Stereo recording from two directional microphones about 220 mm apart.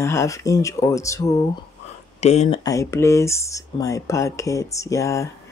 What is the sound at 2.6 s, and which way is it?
Speech, 15° left (ahead or behind).